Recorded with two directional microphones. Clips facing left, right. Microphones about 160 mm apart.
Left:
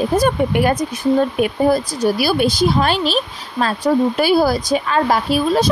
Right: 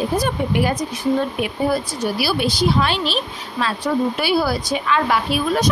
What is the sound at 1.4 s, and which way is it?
Speech, 40° left (ahead or behind).